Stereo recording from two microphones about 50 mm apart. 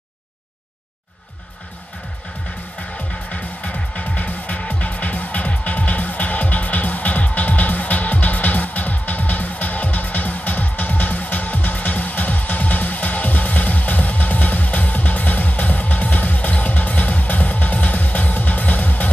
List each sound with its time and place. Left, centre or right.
3.3 s music: left